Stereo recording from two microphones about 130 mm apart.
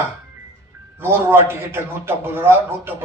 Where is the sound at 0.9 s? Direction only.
20° right (ahead or behind).